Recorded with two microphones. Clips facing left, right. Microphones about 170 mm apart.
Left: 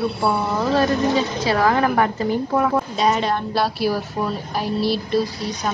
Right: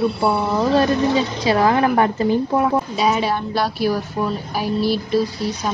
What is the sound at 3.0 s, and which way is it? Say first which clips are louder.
A woman's voice: left 1 dB; 5° right (ahead or behind).